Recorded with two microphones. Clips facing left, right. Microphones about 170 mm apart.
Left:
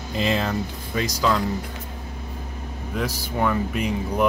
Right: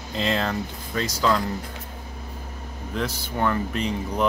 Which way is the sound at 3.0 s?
10° left (ahead or behind).